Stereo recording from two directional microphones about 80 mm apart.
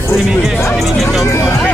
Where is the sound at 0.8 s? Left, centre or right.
Centre.